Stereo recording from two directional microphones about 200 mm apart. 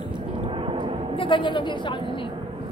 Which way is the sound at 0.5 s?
25° right (ahead or behind).